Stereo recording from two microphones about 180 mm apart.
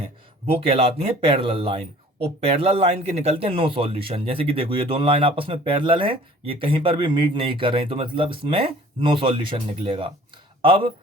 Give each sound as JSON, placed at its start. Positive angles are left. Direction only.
{"t": 0.5, "sound": "speech", "side_deg": -35}